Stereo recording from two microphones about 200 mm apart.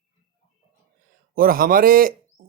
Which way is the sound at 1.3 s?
45° right (ahead or behind).